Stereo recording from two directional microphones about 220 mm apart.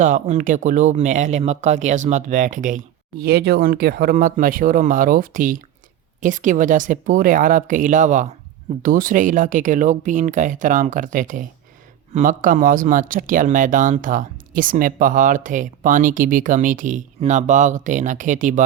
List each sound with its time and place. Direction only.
0.0 s speech: 35° right (ahead or behind)